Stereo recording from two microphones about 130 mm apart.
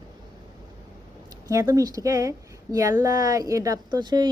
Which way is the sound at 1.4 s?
25° right (ahead or behind).